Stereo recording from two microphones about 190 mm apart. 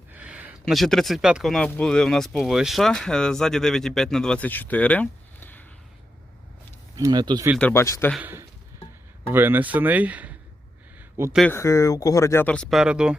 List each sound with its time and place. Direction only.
0.1 s speech: 5° right (ahead or behind); by 5.6 s 10° left (ahead or behind)
6.9 s speech: 20° right (ahead or behind)
7.6 s speech: 15° left (ahead or behind)
8.1 s speech: 10° right (ahead or behind)
11.3 s speech: 10° left (ahead or behind)